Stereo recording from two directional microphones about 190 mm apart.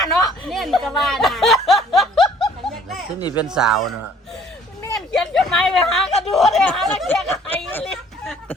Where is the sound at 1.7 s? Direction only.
Centre (ahead or behind).